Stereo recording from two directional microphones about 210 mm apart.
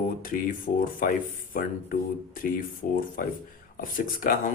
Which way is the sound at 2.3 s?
40° left (ahead or behind).